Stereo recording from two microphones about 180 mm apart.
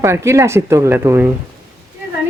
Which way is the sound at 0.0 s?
15° right (ahead or behind).